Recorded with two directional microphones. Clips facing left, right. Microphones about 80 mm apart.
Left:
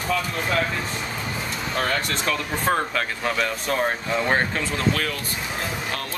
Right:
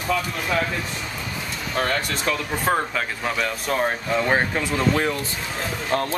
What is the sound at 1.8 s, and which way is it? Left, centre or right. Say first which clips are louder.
Speech: right 1 dB; centre.